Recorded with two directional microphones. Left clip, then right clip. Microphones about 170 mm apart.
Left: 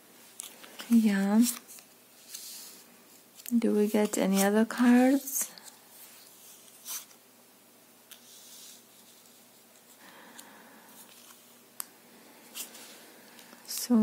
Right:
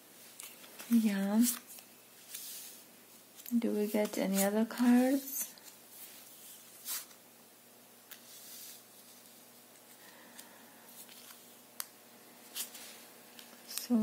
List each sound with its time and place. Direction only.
0.4 s a sound: 20° left (ahead or behind)
1.0 s speech: 40° left (ahead or behind)
2.3 s spray: 20° left (ahead or behind)
3.4 s speech: 50° left (ahead or behind)